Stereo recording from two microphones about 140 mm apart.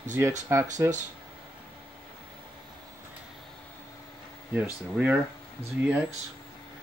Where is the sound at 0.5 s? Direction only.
20° right (ahead or behind).